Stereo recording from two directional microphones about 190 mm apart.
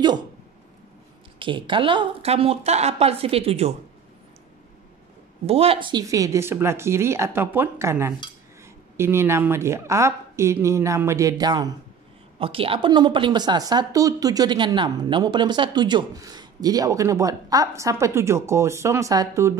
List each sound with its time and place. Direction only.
1.4 s speech: 25° right (ahead or behind)
5.5 s a woman's voice: 30° right (ahead or behind)